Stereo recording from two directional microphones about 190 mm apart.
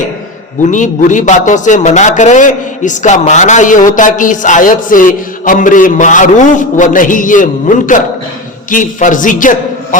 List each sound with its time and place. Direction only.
0.6 s a man's voice: 40° left (ahead or behind)